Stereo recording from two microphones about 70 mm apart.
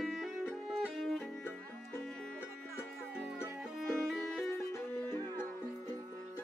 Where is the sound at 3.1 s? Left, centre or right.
Centre.